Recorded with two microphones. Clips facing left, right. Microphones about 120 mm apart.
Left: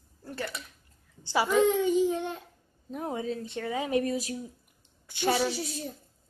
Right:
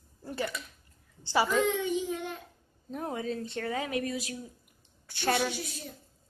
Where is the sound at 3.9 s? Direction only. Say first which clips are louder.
Left 5 dB; 30° left (ahead or behind).